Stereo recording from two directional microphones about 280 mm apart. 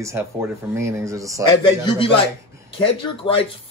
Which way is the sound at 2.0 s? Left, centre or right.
Centre.